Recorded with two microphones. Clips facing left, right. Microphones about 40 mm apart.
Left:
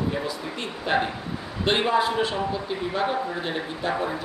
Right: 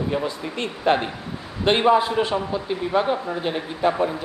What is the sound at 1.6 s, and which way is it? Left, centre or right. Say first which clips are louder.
A man's voice: right 4 dB; centre.